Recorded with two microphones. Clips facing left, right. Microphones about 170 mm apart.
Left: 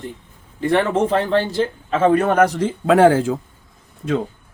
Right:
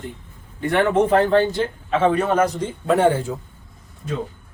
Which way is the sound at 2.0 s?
50° left (ahead or behind).